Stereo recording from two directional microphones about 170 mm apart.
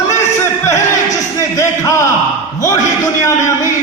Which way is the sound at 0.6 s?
20° left (ahead or behind).